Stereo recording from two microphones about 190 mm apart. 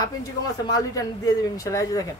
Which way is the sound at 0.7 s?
20° left (ahead or behind).